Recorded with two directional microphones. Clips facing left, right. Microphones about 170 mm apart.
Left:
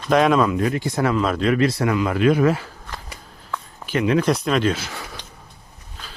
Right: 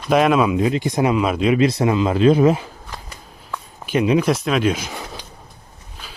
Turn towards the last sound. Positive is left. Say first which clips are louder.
# right 2 dB
turn(degrees=-20)  # may be behind; listen again after turning